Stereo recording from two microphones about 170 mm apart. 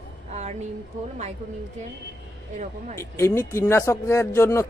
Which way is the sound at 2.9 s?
15° left (ahead or behind).